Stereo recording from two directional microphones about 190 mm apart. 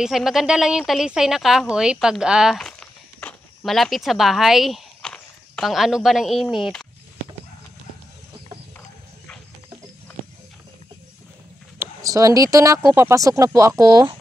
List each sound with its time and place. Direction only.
0.0 s speech: centre (ahead or behind)
11.8 s speech: 15° right (ahead or behind)